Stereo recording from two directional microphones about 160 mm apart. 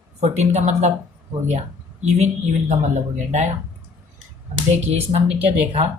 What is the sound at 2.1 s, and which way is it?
Speech, 45° right (ahead or behind).